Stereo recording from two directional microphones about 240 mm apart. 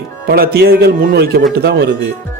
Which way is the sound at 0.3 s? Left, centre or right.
Right.